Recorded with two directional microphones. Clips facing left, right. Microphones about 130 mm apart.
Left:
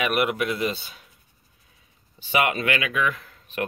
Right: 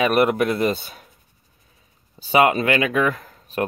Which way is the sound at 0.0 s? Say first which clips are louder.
Right 6 dB; 35° right (ahead or behind).